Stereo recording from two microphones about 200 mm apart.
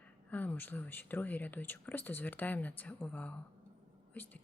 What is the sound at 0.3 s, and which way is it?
Speech, 10° left (ahead or behind).